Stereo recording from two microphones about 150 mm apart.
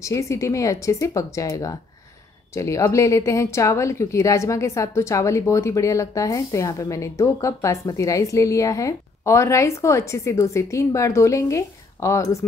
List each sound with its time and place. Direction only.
0.0 s speech: 20° left (ahead or behind)